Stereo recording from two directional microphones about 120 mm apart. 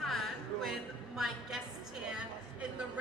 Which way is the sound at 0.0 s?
Centre (ahead or behind).